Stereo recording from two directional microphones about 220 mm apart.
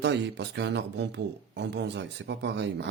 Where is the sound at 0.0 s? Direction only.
50° right (ahead or behind).